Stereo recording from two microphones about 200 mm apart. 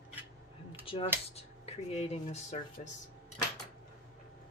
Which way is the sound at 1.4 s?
30° left (ahead or behind).